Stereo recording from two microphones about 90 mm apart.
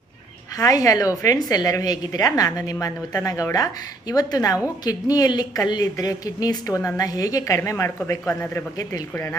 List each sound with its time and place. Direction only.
0.5 s a woman's voice: 40° left (ahead or behind)